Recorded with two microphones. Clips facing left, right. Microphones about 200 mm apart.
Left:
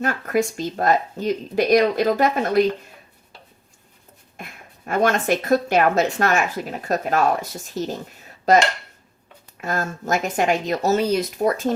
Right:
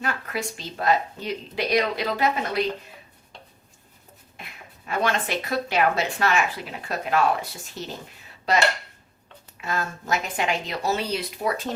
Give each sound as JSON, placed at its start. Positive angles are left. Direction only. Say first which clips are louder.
{"t": 0.0, "sound": "speech", "louder": "left 8 dB", "side_deg": 45}
{"t": 4.4, "sound": "a sound", "louder": "left 6 dB", "side_deg": 50}
{"t": 4.9, "sound": "speech", "louder": "left 6 dB", "side_deg": 45}